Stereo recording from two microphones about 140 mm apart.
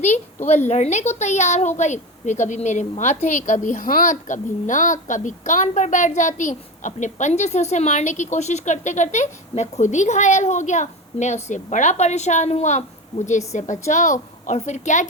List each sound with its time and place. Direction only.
0.0 s a woman's voice: 55° left (ahead or behind)